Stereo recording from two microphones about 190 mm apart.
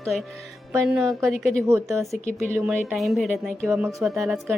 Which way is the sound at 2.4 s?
10° right (ahead or behind).